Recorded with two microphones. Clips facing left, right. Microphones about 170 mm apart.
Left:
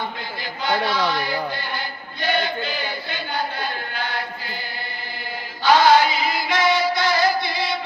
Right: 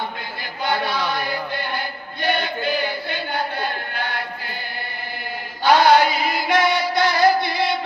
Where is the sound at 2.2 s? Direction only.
55° right (ahead or behind).